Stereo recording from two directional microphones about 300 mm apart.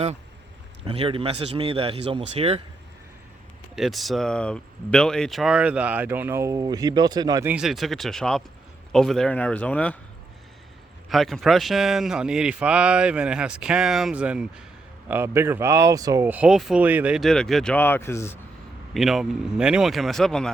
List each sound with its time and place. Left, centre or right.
0.9 s speech: centre
3.8 s speech: centre
11.1 s speech: centre